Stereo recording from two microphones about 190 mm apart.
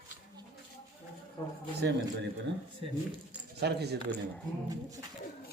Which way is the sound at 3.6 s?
60° right (ahead or behind).